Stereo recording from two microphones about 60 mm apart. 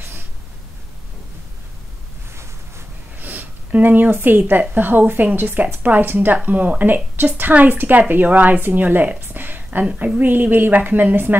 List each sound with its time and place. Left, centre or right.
3.2 s speech: right